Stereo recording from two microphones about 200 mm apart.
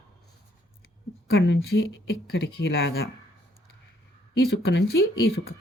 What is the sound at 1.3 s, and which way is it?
Speech, 60° left (ahead or behind).